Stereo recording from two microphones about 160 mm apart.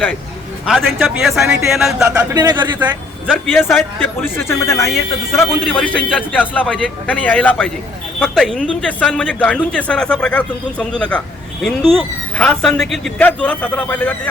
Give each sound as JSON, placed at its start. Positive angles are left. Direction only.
{"t": 0.6, "sound": "a man's voice", "side_deg": 0}
{"t": 2.3, "sound": "a man's voice", "side_deg": -25}
{"t": 3.2, "sound": "a man's voice", "side_deg": 10}